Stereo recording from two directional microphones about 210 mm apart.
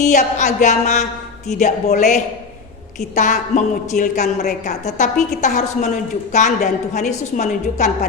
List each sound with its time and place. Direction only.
0.0 s a woman's voice: 35° left (ahead or behind)